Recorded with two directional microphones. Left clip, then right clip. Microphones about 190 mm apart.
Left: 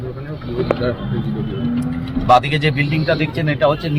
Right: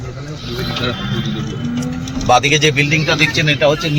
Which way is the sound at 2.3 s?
25° right (ahead or behind).